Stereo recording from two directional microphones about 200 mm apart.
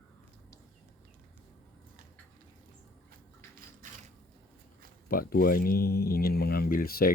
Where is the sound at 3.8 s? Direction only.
40° right (ahead or behind).